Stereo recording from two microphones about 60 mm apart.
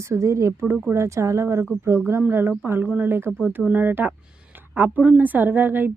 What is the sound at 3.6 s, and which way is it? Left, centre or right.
Speech, right.